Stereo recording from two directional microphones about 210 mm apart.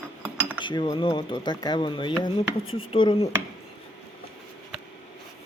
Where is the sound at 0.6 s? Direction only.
20° left (ahead or behind).